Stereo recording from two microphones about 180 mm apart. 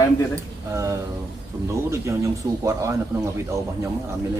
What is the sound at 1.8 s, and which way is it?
Speech, 15° right (ahead or behind).